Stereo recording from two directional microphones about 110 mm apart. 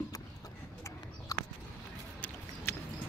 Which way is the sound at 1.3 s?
35° left (ahead or behind).